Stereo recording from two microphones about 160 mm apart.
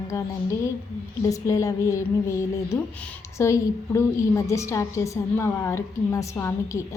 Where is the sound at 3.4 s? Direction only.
20° left (ahead or behind).